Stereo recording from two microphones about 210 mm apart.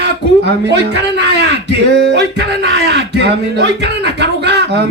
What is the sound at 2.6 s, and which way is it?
Speech, 50° right (ahead or behind).